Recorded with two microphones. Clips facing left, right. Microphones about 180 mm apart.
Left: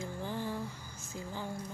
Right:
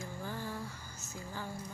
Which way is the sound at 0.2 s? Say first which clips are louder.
Left 4 dB; 15° left (ahead or behind).